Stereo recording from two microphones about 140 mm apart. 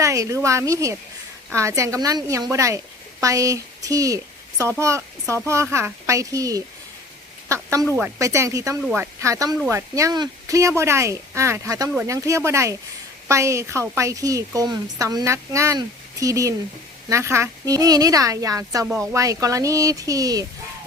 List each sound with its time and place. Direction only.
0.0 s a woman's voice: 20° right (ahead or behind)